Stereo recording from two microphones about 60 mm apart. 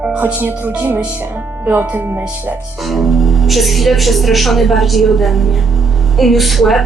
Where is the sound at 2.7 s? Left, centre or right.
Centre.